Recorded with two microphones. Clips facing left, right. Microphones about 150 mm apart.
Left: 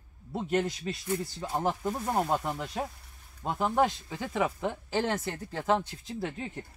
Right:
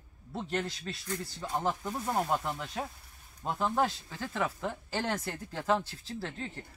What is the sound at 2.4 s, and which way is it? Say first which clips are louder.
Speech: left 3 dB; 5° left (ahead or behind).